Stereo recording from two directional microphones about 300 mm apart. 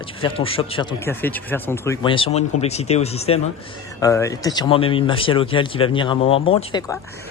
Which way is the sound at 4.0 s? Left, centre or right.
Centre.